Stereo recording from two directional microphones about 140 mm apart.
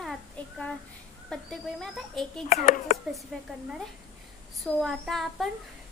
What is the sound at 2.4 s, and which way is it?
Speech, 60° left (ahead or behind).